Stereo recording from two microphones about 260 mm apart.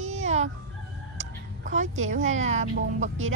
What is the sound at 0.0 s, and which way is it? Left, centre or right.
Fowl, right.